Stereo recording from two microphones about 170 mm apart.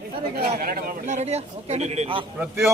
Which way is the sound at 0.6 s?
60° right (ahead or behind).